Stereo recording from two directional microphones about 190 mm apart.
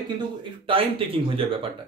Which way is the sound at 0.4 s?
30° right (ahead or behind).